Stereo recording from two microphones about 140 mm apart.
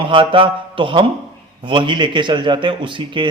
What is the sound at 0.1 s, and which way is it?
Speech, 40° right (ahead or behind).